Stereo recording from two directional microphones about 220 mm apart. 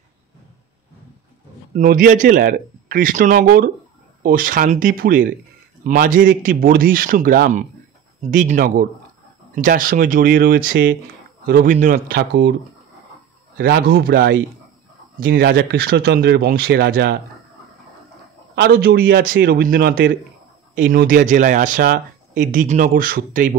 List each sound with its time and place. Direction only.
1.7 s speech: 40° right (ahead or behind)
13.6 s speech: 45° right (ahead or behind)
18.5 s speech: 45° right (ahead or behind)